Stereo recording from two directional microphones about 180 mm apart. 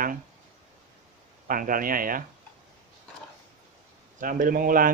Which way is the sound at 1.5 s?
50° right (ahead or behind).